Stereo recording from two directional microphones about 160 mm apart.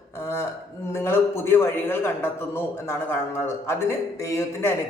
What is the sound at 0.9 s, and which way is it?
A man's voice, 15° left (ahead or behind).